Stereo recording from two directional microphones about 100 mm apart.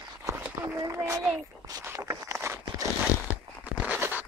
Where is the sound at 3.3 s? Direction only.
15° right (ahead or behind).